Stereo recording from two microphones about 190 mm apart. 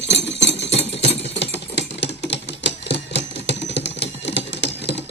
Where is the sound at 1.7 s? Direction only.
65° left (ahead or behind).